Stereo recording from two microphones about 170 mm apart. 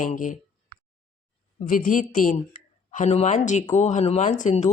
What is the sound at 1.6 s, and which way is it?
Speech, 55° left (ahead or behind).